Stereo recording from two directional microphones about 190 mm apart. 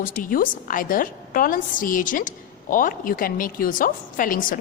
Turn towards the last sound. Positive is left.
turn(degrees=45)  # may be behind; listen again after turning